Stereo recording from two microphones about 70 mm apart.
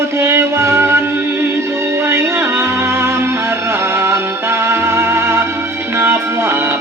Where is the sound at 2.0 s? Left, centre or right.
Right.